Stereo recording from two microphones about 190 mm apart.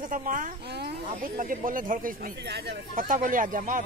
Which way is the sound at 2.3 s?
60° right (ahead or behind).